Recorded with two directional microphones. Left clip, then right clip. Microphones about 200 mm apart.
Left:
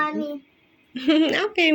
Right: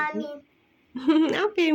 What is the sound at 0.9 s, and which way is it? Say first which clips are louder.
Speech: left 2 dB; 20° right (ahead or behind).